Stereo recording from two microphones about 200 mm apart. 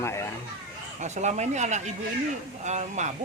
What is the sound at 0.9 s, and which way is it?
Speech, 35° right (ahead or behind).